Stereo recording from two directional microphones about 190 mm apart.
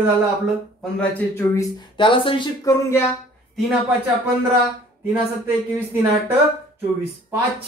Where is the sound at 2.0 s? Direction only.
25° left (ahead or behind).